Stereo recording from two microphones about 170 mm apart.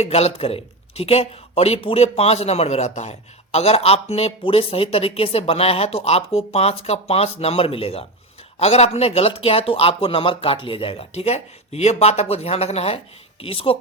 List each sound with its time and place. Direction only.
0.0 s speech: 40° left (ahead or behind)